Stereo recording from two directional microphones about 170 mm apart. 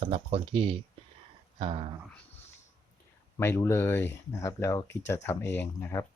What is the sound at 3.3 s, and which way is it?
Speech, 15° left (ahead or behind).